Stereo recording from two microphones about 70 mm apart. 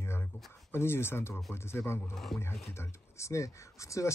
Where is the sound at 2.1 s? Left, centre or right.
Centre.